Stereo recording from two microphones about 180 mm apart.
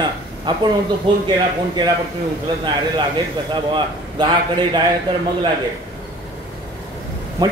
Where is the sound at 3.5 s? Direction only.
25° right (ahead or behind).